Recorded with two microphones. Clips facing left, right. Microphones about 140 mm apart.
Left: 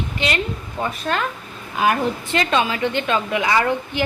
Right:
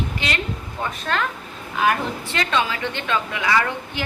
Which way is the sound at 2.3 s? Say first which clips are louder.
Left 3 dB; 20° left (ahead or behind).